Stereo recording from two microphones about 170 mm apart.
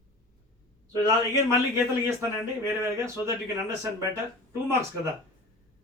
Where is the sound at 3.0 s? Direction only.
15° right (ahead or behind).